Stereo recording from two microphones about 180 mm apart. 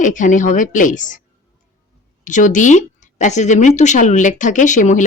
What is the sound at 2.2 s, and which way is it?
Speech, 45° left (ahead or behind).